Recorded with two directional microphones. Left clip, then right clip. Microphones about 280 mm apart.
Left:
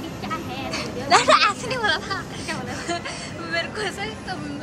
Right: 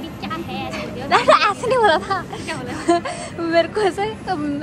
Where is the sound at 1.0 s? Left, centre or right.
Centre.